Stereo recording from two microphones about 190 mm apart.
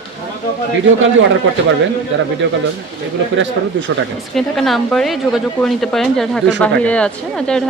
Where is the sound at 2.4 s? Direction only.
65° right (ahead or behind).